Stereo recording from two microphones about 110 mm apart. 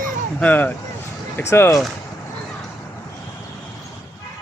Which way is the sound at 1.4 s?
25° left (ahead or behind).